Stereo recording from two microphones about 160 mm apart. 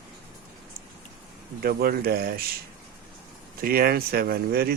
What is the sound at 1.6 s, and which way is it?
Speech, 70° right (ahead or behind).